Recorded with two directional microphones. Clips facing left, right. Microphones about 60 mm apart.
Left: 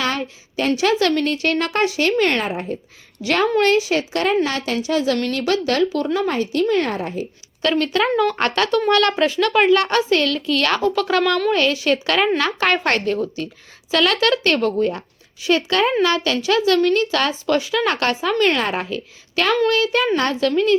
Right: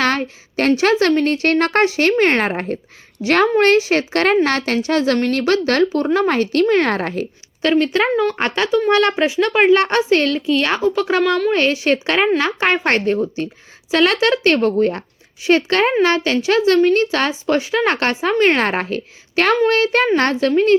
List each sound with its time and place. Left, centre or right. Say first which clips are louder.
0.0 s a sound: right 5 dB; right
0.8 s speech: right 1 dB; right
3.2 s speech: right 3 dB; right
4.1 s speech: right 5 dB; right
6.1 s speech: right 5 dB; right
6.9 s speech: right 4 dB; right
7.6 s a woman's voice: right 3 dB; right
8.1 s a woman's voice: even; centre; by 10.4 s right
10.4 s a woman's voice: right 2 dB; centre